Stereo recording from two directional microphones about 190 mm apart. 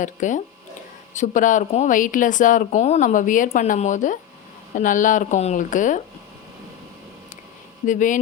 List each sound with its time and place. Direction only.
0.0 s speech: 40° left (ahead or behind)
7.9 s speech: 45° left (ahead or behind)